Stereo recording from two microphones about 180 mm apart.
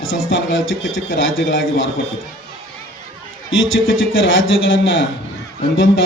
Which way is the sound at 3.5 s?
90° left.